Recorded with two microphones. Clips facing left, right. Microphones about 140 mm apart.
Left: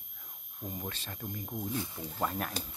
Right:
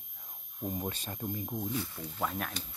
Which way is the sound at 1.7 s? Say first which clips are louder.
Even; 15° left (ahead or behind).